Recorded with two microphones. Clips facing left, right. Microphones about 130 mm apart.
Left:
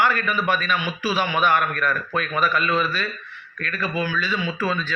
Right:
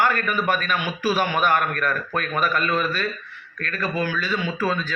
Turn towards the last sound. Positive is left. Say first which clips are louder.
# right 1 dB
turn(degrees=-45)  # may be behind; listen again after turning